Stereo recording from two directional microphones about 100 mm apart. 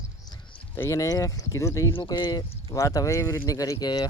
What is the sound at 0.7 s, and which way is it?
Speech, 25° left (ahead or behind).